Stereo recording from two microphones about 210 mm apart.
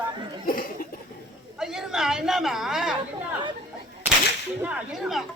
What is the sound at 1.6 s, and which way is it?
A woman's voice, centre (ahead or behind).